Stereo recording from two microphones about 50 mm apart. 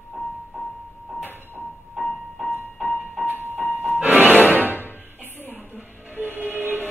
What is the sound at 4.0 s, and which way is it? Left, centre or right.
Music, right.